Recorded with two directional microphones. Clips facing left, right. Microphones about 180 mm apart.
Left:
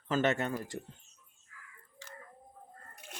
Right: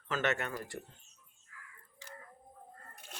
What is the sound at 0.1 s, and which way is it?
Speech, 30° left (ahead or behind).